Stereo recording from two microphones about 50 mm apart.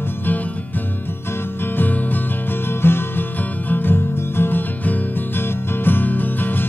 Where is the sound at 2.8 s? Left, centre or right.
Left.